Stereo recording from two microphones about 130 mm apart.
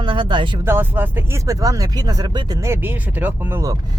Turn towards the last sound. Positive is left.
turn(degrees=-15)  # may be behind; listen again after turning